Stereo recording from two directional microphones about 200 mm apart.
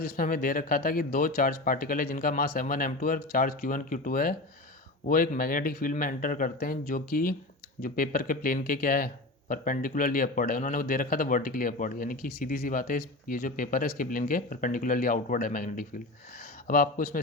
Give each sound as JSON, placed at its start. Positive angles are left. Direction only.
{"t": 0.0, "sound": "speech", "side_deg": 45}